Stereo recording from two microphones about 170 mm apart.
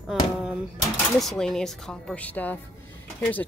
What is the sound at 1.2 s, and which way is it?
Speech, centre (ahead or behind).